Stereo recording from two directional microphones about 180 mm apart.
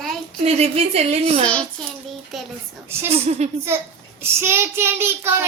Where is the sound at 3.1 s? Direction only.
35° right (ahead or behind).